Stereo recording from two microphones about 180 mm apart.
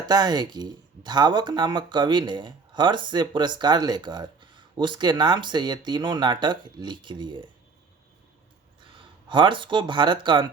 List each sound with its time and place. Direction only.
0.0 s speech: 25° right (ahead or behind)
9.0 s speech: 25° right (ahead or behind)